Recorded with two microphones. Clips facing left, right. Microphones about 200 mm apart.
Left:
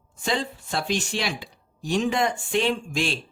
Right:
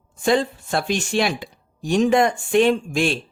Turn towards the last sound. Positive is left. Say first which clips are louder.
# right 6 dB
turn(degrees=-55)  # may be behind; listen again after turning